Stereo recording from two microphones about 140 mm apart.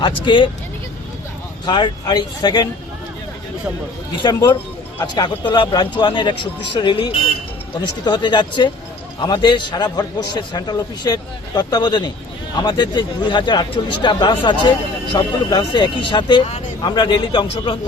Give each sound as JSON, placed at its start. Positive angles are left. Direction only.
{"t": 0.0, "sound": "speech", "side_deg": 35}
{"t": 1.6, "sound": "speech", "side_deg": 30}
{"t": 4.1, "sound": "speech", "side_deg": 30}